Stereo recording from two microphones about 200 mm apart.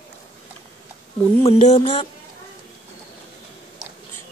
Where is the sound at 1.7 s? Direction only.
25° left (ahead or behind).